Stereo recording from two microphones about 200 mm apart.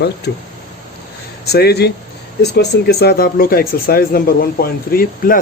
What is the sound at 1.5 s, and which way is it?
Speech, 55° left (ahead or behind).